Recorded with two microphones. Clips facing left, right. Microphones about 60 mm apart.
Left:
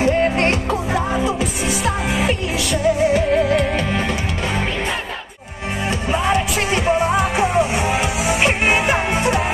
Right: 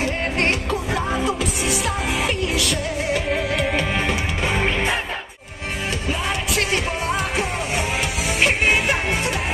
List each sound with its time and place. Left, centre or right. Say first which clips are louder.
0.0 s music: left 6 dB; centre
6.1 s music: left 7 dB; centre